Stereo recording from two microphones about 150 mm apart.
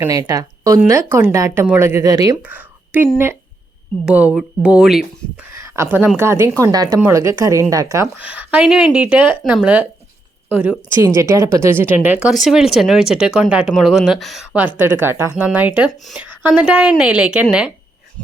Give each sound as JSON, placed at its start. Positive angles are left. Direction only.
{"t": 0.0, "sound": "a woman's voice", "side_deg": -20}
{"t": 2.4, "sound": "speech", "side_deg": -10}
{"t": 5.5, "sound": "a woman's voice", "side_deg": -20}
{"t": 11.0, "sound": "speech", "side_deg": -20}
{"t": 15.0, "sound": "speech", "side_deg": -15}